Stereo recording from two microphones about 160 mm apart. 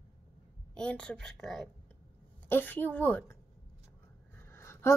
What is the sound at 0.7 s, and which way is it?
A child's voice, 5° left (ahead or behind).